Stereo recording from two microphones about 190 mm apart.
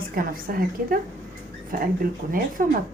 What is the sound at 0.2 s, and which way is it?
Speech, 50° right (ahead or behind).